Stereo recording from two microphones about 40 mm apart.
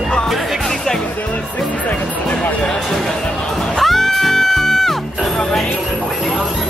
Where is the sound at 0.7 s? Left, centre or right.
Centre.